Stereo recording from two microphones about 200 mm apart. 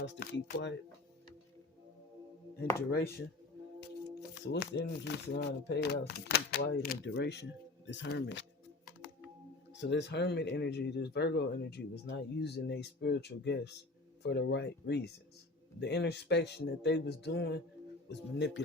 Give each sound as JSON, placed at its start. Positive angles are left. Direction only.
{"t": 0.0, "sound": "speech", "side_deg": 65}
{"t": 3.8, "sound": "speech", "side_deg": 55}
{"t": 9.8, "sound": "speech", "side_deg": 60}